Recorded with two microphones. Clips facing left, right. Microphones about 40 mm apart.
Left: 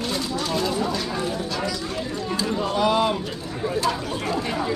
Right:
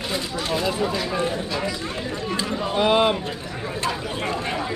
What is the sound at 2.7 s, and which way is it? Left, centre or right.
Speech, right.